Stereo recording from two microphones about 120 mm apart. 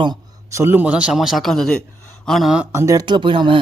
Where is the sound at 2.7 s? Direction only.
25° right (ahead or behind).